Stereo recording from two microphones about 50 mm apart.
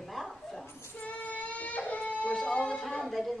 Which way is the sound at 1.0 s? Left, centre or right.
Left.